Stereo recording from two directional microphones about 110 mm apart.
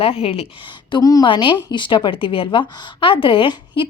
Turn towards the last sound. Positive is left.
turn(degrees=50)  # may be behind; listen again after turning